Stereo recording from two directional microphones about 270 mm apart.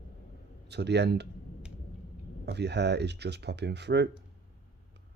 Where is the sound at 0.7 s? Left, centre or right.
Right.